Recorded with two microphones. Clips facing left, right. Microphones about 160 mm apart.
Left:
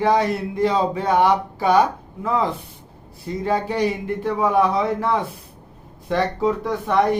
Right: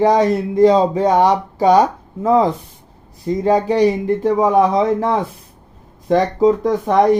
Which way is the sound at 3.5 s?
40° right (ahead or behind).